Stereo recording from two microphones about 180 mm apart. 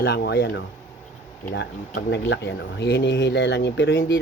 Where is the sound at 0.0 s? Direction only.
65° left (ahead or behind).